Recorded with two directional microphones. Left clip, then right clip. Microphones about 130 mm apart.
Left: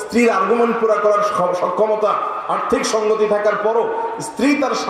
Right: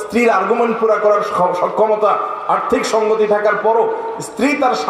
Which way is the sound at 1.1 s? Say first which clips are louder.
Right 2 dB; 40° right (ahead or behind).